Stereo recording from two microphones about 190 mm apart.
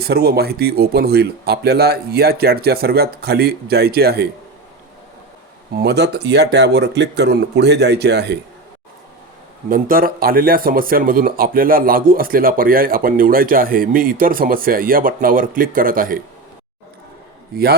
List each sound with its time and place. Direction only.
0.0 s speech: 55° right (ahead or behind)
5.7 s speech: 60° right (ahead or behind)
9.6 s speech: 45° right (ahead or behind)
17.5 s speech: 55° right (ahead or behind)